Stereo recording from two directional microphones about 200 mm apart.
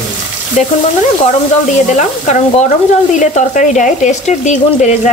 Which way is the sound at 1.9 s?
35° left (ahead or behind).